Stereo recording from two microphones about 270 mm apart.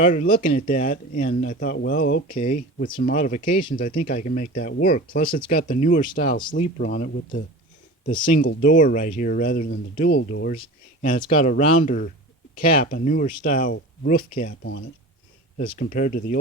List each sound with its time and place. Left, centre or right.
0.1 s speech: left
11.2 s speech: left